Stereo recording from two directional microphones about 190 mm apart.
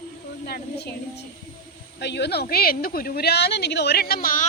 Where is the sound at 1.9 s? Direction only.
65° left (ahead or behind).